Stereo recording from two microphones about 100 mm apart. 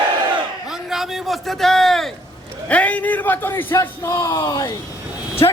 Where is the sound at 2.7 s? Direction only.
15° left (ahead or behind); by 4.7 s 40° left (ahead or behind).